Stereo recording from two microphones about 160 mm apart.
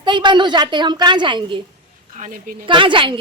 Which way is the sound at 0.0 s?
30° right (ahead or behind).